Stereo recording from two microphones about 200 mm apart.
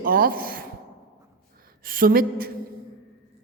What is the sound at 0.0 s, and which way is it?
Speech, 45° right (ahead or behind).